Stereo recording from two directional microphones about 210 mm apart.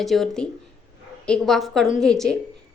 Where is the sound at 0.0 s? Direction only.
Centre (ahead or behind).